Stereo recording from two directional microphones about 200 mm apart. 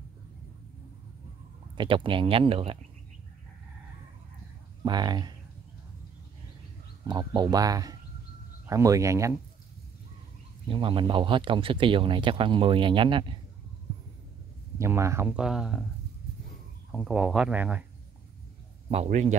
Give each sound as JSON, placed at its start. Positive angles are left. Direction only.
{"t": 1.8, "sound": "speech", "side_deg": -25}
{"t": 4.8, "sound": "speech", "side_deg": -20}
{"t": 7.1, "sound": "speech", "side_deg": -20}
{"t": 10.7, "sound": "speech", "side_deg": -25}
{"t": 14.8, "sound": "speech", "side_deg": -15}
{"t": 16.9, "sound": "speech", "side_deg": -5}
{"t": 18.9, "sound": "speech", "side_deg": -35}